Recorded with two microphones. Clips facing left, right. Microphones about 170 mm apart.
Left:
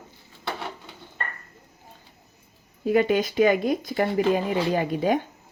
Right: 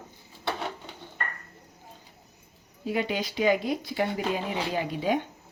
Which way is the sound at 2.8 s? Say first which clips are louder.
Left 8 dB; 50° left (ahead or behind).